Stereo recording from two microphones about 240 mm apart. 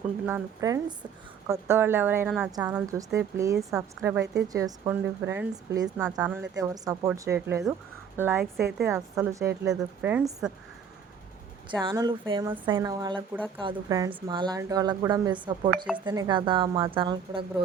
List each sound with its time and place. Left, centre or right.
0.3 s a woman's voice: centre
11.8 s a woman's voice: centre